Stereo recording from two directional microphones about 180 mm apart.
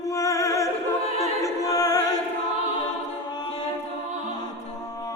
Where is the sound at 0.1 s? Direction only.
20° left (ahead or behind).